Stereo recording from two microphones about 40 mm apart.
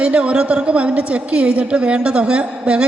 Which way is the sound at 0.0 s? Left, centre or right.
Right.